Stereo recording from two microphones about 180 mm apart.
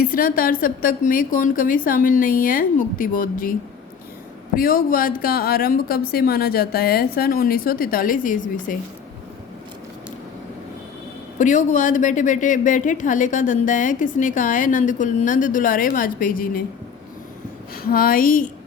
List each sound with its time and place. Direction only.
0.0 s a woman's voice: 55° left (ahead or behind)
4.5 s a woman's voice: 50° left (ahead or behind)
11.3 s a woman's voice: 45° left (ahead or behind)
17.8 s a woman's voice: 55° left (ahead or behind)